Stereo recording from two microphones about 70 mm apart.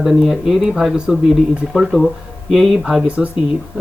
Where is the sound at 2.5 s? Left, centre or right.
Centre.